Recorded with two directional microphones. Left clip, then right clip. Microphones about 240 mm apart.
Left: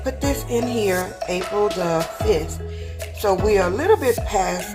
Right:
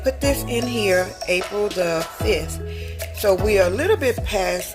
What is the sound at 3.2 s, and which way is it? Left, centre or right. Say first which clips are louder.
Speech: right 1 dB; right.